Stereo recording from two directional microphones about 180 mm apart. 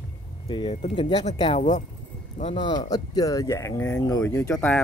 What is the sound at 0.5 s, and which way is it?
Speech, 25° left (ahead or behind).